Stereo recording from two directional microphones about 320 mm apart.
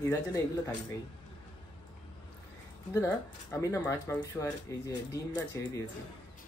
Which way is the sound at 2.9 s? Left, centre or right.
Centre.